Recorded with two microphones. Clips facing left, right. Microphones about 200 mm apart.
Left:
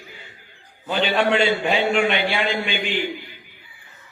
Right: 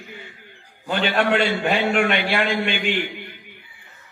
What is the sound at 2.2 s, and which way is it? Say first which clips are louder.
Speech: right 1 dB; 55° right (ahead or behind).